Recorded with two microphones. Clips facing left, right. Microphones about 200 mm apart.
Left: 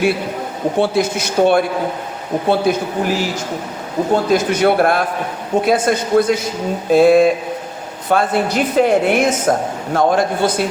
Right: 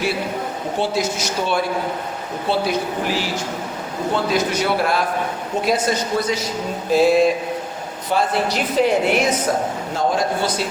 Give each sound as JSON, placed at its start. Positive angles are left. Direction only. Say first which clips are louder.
{"t": 0.8, "sound": "a man's voice", "louder": "left 5 dB", "side_deg": 55}